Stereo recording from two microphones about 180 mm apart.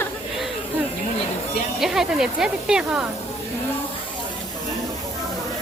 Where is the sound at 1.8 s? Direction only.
Centre (ahead or behind).